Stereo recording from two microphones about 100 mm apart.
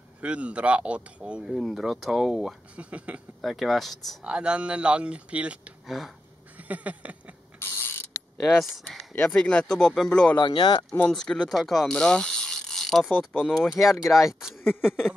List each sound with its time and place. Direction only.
0.2 s speech: 10° right (ahead or behind)
2.7 s speech: 15° right (ahead or behind)
3.3 s speech: centre (ahead or behind)
4.3 s speech: 10° right (ahead or behind)
5.9 s speech: centre (ahead or behind)
6.7 s speech: 15° right (ahead or behind)
7.5 s mechanisms: 20° left (ahead or behind)
8.7 s speech: 5° left (ahead or behind)
10.3 s speech: 50° left (ahead or behind)
11.1 s speech: 5° left (ahead or behind)
14.6 s a sound: 20° left (ahead or behind)